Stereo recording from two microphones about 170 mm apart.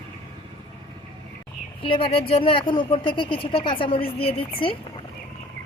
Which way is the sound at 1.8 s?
30° left (ahead or behind).